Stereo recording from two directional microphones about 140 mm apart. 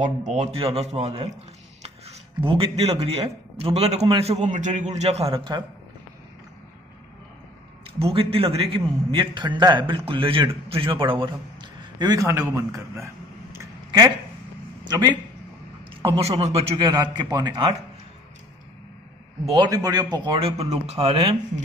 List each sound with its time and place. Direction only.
0.0 s a man's voice: 55° right (ahead or behind); by 5.7 s 35° right (ahead or behind)
8.0 s a man's voice: 40° right (ahead or behind)
11.8 s a sound: 30° right (ahead or behind)
14.9 s speech: 30° right (ahead or behind)
15.9 s a man's voice: 40° right (ahead or behind)
16.7 s a man's voice: 30° right (ahead or behind)
19.5 s a man's voice: 30° right (ahead or behind)
20.3 s a man's voice: 45° right (ahead or behind)